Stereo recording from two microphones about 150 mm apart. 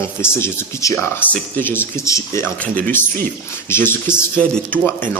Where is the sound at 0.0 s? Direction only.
15° left (ahead or behind).